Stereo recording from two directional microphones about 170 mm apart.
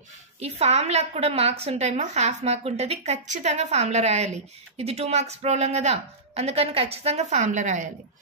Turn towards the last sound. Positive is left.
turn(degrees=-50)  # may be behind; listen again after turning